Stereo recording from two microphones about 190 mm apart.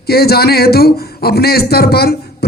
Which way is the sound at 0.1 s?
55° left (ahead or behind).